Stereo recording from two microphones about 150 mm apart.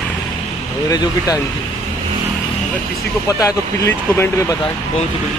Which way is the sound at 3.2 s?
20° left (ahead or behind).